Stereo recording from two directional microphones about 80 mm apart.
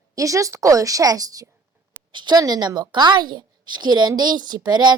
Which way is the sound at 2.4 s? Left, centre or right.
Right.